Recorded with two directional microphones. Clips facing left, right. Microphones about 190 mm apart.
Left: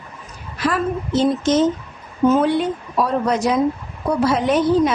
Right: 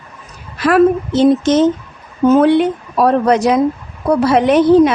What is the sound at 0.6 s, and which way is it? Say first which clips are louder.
A woman's voice: right 10 dB; 70° right (ahead or behind).